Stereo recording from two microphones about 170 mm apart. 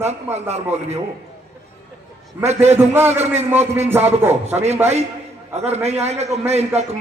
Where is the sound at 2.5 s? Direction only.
40° right (ahead or behind).